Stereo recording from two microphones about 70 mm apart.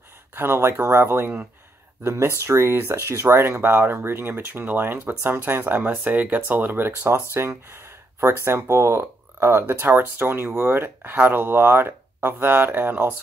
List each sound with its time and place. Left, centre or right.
0.3 s speech: right